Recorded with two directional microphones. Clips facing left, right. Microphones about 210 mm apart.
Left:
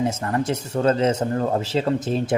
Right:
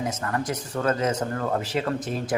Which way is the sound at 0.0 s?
30° left (ahead or behind).